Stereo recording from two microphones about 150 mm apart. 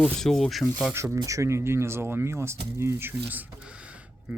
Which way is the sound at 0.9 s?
20° right (ahead or behind).